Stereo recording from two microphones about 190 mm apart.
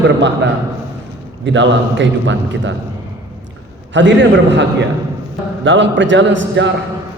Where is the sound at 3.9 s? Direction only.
75° right (ahead or behind).